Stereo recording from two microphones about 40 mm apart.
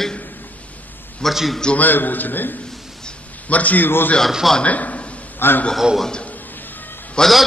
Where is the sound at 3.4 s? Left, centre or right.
Left.